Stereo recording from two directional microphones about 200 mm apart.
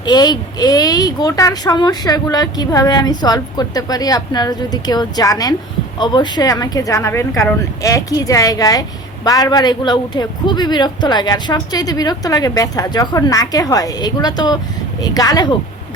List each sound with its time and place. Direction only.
0.0 s speech: 20° left (ahead or behind)